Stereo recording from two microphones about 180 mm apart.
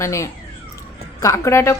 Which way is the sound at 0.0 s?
15° left (ahead or behind).